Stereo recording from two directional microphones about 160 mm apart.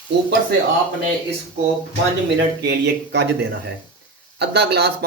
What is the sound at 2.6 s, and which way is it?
Speech, 90° right.